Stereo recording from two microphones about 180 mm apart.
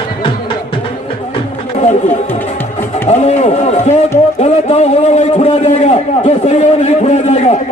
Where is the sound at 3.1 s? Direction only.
40° left (ahead or behind).